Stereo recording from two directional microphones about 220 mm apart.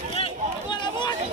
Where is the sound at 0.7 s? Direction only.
20° left (ahead or behind).